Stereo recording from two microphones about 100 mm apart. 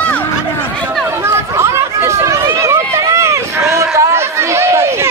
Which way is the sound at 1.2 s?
25° right (ahead or behind).